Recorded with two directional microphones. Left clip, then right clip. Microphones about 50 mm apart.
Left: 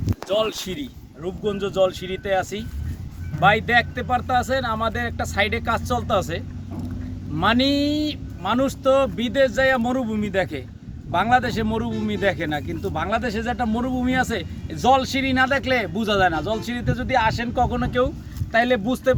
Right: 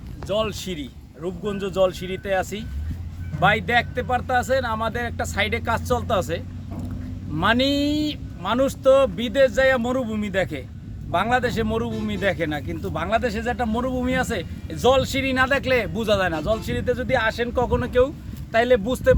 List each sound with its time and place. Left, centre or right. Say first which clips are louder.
0.3 s speech: left 2 dB; right